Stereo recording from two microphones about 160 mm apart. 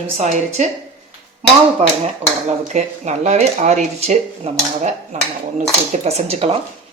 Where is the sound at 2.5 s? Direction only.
45° right (ahead or behind).